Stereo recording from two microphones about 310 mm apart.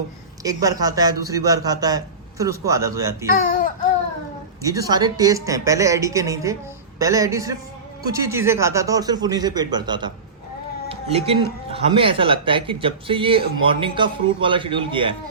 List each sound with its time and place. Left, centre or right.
0.4 s speech: centre
3.2 s speech: left
4.6 s speech: centre